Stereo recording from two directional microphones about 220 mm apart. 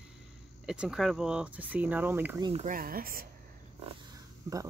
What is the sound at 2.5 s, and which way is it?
Speech, 35° right (ahead or behind).